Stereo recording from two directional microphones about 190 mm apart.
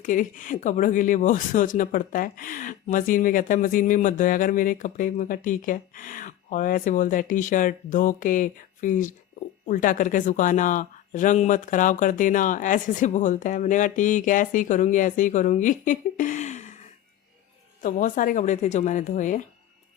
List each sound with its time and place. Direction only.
0.0 s speech: 45° left (ahead or behind)
17.8 s speech: 45° left (ahead or behind)